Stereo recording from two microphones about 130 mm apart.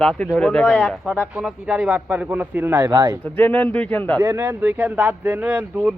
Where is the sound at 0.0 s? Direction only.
5° left (ahead or behind); by 3.2 s 20° right (ahead or behind).